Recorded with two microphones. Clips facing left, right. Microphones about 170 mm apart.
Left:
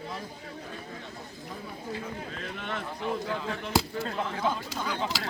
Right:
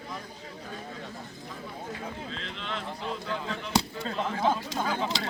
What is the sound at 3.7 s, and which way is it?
Speech, 5° left (ahead or behind).